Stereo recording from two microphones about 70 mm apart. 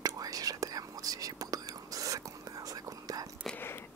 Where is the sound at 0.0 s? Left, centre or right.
Right.